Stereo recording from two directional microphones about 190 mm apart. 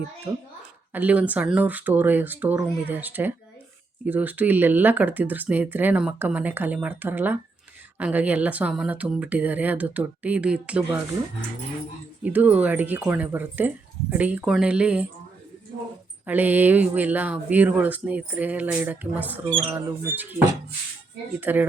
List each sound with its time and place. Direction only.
0.3 s a child's voice: 25° right (ahead or behind)
0.9 s speech: 10° right (ahead or behind)
12.2 s speech: 10° right (ahead or behind)
16.2 s speech: 10° right (ahead or behind)
21.4 s speech: 10° right (ahead or behind)